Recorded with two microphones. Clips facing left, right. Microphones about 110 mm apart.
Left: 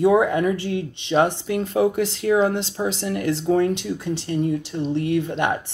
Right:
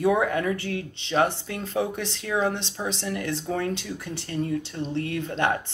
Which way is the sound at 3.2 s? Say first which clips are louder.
Left 12 dB; 30° left (ahead or behind).